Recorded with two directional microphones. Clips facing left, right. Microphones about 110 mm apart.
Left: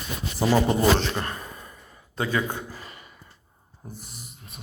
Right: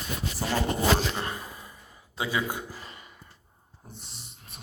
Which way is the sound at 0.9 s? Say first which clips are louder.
Left 3 dB; 10° right (ahead or behind).